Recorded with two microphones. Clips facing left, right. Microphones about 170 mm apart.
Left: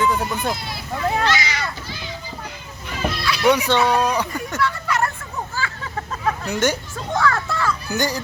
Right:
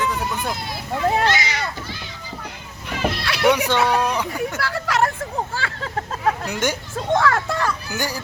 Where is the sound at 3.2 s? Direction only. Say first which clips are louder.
Left 2 dB; 65° right (ahead or behind).